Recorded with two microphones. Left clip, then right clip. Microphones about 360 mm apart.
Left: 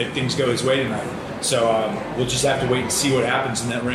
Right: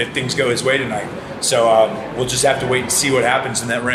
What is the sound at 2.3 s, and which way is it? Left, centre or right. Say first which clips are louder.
Speech: right 4 dB; centre.